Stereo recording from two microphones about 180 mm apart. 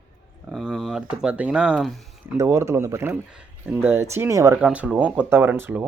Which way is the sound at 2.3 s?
15° right (ahead or behind).